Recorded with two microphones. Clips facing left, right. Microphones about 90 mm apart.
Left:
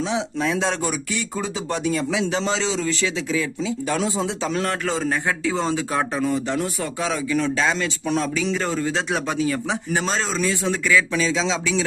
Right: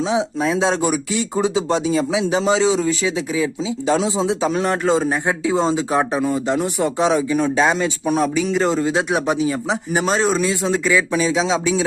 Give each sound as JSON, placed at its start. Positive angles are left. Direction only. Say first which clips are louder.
{"t": 0.1, "sound": "speech", "louder": "right 4 dB", "side_deg": -15}